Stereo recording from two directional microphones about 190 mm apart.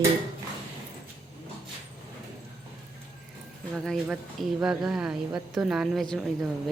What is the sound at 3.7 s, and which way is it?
Speech, centre (ahead or behind).